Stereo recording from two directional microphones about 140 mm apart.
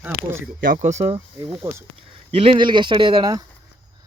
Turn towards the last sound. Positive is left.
turn(degrees=-30)  # may be behind; listen again after turning